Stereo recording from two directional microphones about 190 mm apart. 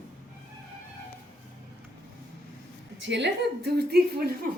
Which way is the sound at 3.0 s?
65° right (ahead or behind).